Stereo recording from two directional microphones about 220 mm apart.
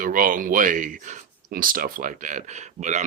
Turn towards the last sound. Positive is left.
turn(degrees=-35)  # may be behind; listen again after turning